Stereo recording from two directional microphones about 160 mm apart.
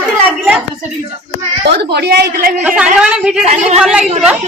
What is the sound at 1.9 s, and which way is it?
Speech, 85° right.